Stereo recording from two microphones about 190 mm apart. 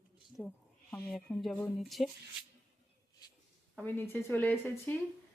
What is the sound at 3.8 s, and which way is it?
Speech, 10° left (ahead or behind).